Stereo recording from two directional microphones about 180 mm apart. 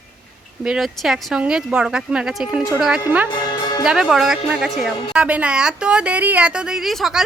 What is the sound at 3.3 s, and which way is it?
Music, 25° left (ahead or behind).